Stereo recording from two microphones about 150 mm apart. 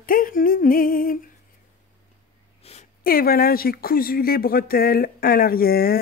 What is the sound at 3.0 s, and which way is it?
Speech, 75° left (ahead or behind).